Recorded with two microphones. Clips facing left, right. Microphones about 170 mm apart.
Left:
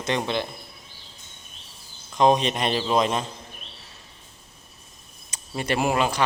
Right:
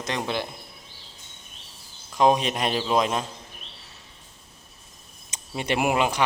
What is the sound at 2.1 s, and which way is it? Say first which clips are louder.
A man's voice: left 1 dB; 5° right (ahead or behind).